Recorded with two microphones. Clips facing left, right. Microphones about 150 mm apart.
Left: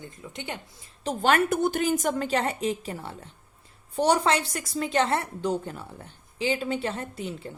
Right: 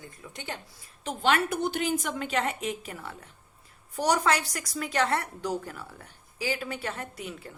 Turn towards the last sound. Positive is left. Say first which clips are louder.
# left 4 dB
turn(degrees=25)  # may be behind; listen again after turning